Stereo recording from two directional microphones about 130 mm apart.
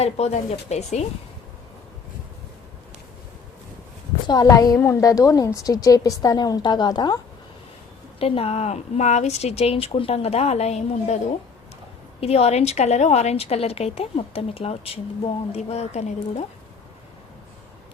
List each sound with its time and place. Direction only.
0.0 s speech: 55° left (ahead or behind)
4.3 s a woman's voice: 30° left (ahead or behind)
8.2 s speech: 50° left (ahead or behind)
12.2 s a woman's voice: 50° left (ahead or behind)